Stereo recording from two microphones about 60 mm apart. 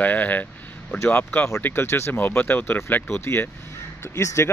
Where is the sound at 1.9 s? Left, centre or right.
Left.